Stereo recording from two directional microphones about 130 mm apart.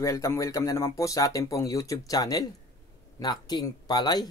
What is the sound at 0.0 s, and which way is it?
A man's voice, 25° left (ahead or behind).